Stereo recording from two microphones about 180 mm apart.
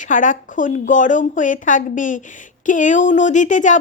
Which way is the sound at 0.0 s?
45° left (ahead or behind).